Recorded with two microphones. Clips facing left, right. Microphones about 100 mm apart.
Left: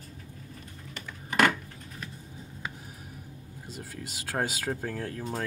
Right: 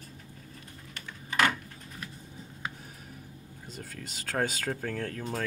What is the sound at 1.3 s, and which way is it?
Coin, 60° left (ahead or behind).